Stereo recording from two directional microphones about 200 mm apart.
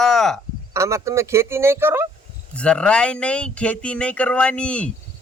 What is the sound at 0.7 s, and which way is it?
Speech, 15° right (ahead or behind).